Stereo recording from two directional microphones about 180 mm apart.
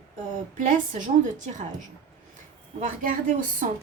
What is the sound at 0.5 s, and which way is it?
Speech, 45° right (ahead or behind).